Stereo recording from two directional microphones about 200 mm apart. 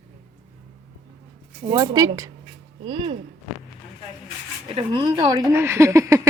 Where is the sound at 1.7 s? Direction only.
20° right (ahead or behind).